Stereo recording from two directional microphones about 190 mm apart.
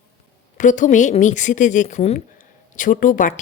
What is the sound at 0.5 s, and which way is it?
Speech, 40° left (ahead or behind).